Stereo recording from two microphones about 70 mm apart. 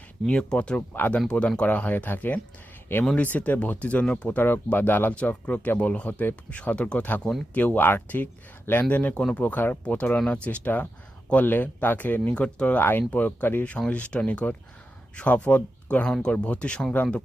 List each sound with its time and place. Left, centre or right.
0.3 s speech: centre
0.9 s speech: left
1.3 s speech: centre
4.3 s speech: left; by 7.4 s centre
7.5 s speech: left
12.8 s speech: left
13.7 s speech: centre